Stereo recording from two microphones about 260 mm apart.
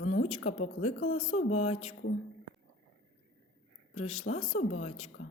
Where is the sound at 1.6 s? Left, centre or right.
Left.